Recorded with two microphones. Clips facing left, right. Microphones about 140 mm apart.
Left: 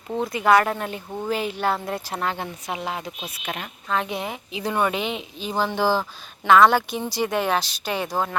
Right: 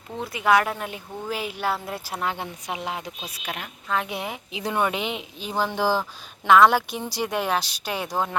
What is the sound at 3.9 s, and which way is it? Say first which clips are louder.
A woman's voice: left 2 dB; 10° right (ahead or behind).